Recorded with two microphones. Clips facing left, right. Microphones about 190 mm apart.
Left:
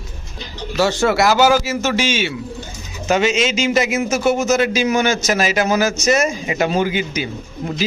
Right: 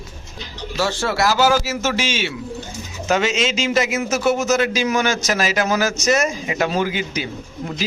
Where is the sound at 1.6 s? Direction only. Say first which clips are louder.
Left 3 dB; 5° right (ahead or behind).